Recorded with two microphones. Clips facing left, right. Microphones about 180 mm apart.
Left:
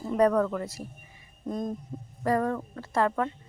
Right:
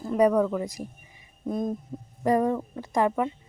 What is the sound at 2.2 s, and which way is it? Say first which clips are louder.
Speech: right 3 dB; 15° right (ahead or behind).